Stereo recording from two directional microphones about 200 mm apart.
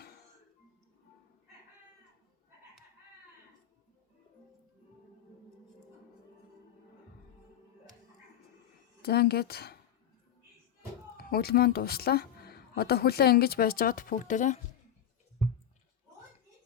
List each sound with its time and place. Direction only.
9.0 s speech: 50° left (ahead or behind)
11.2 s speech: 50° left (ahead or behind)